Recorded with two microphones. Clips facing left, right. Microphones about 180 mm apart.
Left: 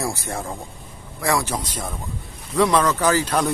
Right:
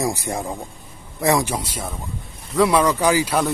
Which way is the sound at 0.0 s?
15° right (ahead or behind).